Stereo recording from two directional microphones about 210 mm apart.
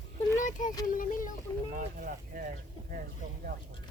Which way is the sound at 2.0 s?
40° right (ahead or behind).